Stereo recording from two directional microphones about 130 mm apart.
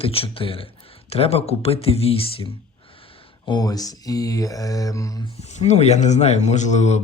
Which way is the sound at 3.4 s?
30° left (ahead or behind).